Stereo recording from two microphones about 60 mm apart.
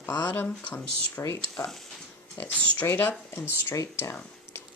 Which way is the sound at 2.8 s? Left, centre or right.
Left.